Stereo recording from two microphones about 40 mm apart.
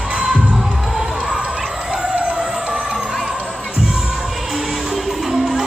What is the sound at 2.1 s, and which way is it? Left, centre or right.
Vehicle, right.